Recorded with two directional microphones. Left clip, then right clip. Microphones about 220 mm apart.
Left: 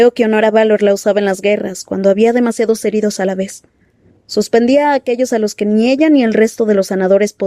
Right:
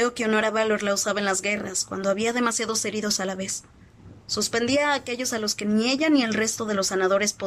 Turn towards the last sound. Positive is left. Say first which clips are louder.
# left 10 dB
turn(degrees=35)  # may be behind; listen again after turning